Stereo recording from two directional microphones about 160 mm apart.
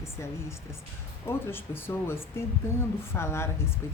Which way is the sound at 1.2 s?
15° left (ahead or behind).